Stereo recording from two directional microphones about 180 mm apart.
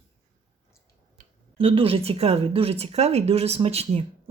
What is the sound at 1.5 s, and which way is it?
Speech, 30° right (ahead or behind).